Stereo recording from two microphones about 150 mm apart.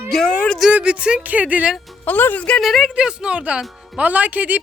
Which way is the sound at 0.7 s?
10° right (ahead or behind).